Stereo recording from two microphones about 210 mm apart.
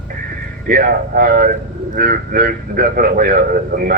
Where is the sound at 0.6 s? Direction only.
40° right (ahead or behind).